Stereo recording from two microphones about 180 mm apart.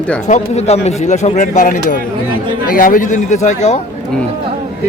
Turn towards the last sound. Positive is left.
turn(degrees=40)  # may be behind; listen again after turning